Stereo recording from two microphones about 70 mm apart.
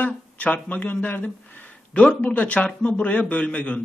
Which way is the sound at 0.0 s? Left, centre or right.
Left.